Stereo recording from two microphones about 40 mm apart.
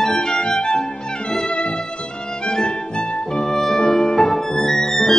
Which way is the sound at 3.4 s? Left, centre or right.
Centre.